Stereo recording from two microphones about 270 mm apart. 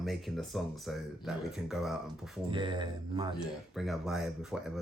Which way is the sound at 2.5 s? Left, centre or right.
Centre.